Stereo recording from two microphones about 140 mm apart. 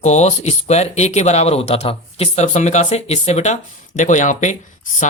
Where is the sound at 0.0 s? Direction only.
50° left (ahead or behind).